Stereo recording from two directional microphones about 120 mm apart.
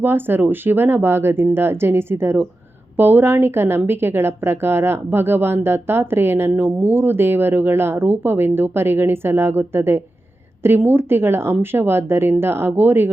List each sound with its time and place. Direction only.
0.0 s a woman's voice: 15° right (ahead or behind)